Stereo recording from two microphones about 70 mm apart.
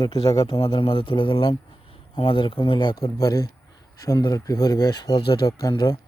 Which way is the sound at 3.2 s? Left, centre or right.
Left.